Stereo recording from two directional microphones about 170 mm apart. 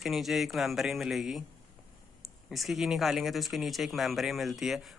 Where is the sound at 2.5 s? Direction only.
Centre (ahead or behind).